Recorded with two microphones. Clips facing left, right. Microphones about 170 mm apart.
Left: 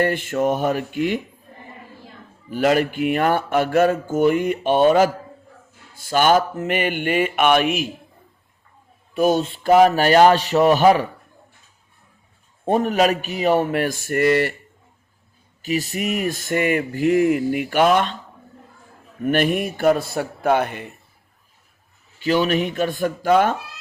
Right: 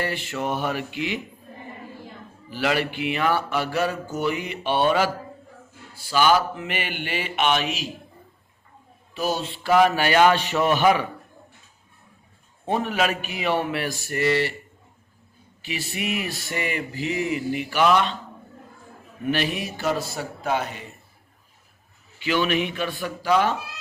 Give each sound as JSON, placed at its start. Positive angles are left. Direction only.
{"t": 0.0, "sound": "speech", "side_deg": 50}
{"t": 2.5, "sound": "speech", "side_deg": 45}
{"t": 9.1, "sound": "a sound", "side_deg": 50}
{"t": 12.6, "sound": "speech", "side_deg": 45}
{"t": 15.6, "sound": "speech", "side_deg": 45}
{"t": 19.2, "sound": "speech", "side_deg": 50}
{"t": 22.2, "sound": "speech", "side_deg": 40}